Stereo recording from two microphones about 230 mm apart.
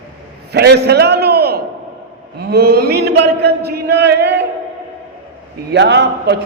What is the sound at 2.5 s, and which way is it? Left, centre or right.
A man's voice, right.